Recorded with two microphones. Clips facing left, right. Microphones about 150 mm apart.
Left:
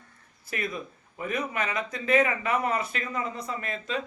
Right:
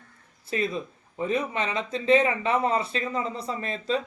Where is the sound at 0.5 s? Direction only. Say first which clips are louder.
Right 5 dB; 25° right (ahead or behind).